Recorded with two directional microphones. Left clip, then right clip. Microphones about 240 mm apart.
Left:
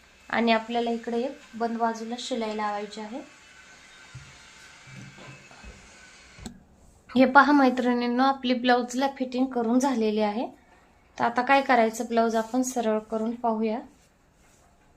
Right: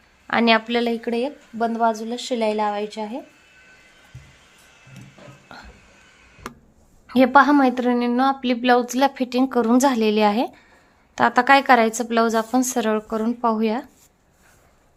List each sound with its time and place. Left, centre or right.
0.3 s a woman's voice: right
7.1 s a woman's voice: right